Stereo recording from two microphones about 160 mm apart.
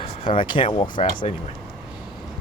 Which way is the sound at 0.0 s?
35° left (ahead or behind).